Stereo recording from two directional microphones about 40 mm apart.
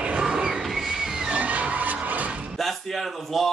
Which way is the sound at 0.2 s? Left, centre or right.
Right.